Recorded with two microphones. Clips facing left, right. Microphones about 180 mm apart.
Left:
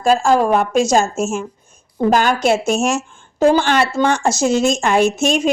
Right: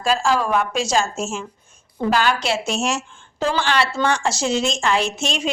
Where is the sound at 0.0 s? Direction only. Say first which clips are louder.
Left 6 dB; 45° left (ahead or behind).